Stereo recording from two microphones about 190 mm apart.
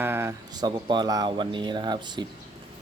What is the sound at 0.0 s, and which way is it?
Speech, 10° right (ahead or behind).